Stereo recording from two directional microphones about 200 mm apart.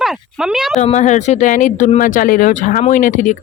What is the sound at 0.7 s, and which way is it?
Speech, 35° left (ahead or behind).